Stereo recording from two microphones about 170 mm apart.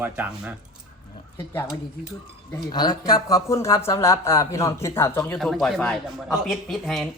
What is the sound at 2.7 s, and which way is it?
Speech, 25° left (ahead or behind).